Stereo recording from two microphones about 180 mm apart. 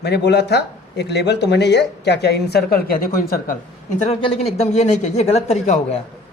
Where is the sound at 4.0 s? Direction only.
30° left (ahead or behind).